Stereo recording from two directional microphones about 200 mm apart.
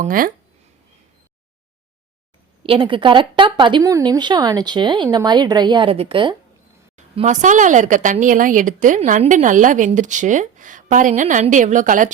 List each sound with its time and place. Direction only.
0.0 s speech: 45° right (ahead or behind)
2.6 s speech: 25° right (ahead or behind)
6.9 s speech: 35° right (ahead or behind)